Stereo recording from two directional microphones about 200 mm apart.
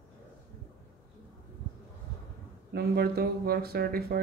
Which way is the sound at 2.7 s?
50° right (ahead or behind).